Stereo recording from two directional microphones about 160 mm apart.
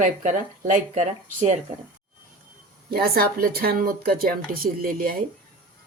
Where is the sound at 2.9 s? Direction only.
70° right (ahead or behind).